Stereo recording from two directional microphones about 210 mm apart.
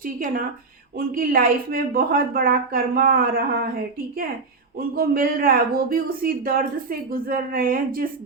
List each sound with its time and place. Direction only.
0.0 s a woman's voice: 40° right (ahead or behind)
4.8 s speech: 45° right (ahead or behind)